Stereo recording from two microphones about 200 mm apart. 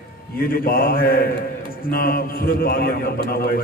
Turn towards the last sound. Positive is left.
turn(degrees=50)  # may be behind; listen again after turning